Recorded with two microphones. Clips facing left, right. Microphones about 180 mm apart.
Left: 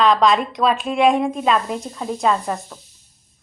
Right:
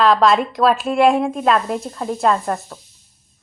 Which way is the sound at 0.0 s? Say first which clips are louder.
Right 1 dB; 5° right (ahead or behind).